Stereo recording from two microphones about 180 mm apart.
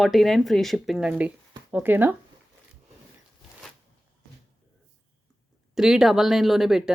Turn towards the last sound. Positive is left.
turn(degrees=0)  # may be behind; listen again after turning